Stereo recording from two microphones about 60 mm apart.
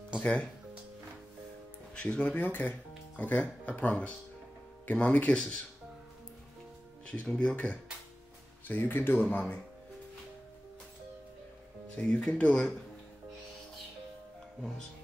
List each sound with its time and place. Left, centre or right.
0.2 s speech: left
2.0 s speech: left
4.9 s speech: left
7.1 s speech: centre
11.9 s speech: left